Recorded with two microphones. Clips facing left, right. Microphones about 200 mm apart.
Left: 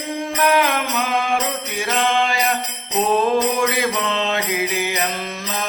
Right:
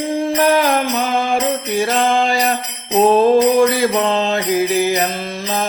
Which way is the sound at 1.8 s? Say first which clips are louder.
Right 3 dB; 35° right (ahead or behind).